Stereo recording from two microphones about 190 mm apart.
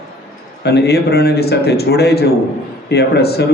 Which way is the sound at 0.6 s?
60° left (ahead or behind).